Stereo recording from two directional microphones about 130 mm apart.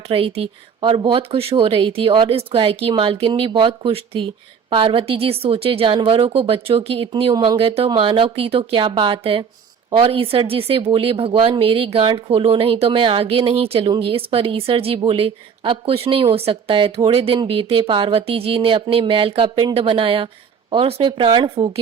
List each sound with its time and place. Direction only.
0.1 s speech: 45° right (ahead or behind)
7.3 s speech: 30° right (ahead or behind)
7.9 s speech: 40° right (ahead or behind)